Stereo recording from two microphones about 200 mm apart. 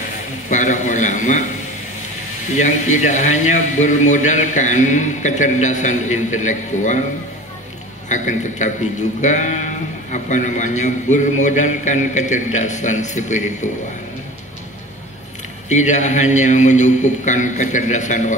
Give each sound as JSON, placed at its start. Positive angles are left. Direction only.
{"t": 0.5, "sound": "a man's voice", "side_deg": 40}
{"t": 2.5, "sound": "a man's voice", "side_deg": 35}
{"t": 8.1, "sound": "a man's voice", "side_deg": 40}
{"t": 15.7, "sound": "a man's voice", "side_deg": 35}